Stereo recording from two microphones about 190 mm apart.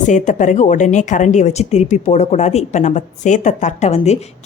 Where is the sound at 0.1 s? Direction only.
40° left (ahead or behind).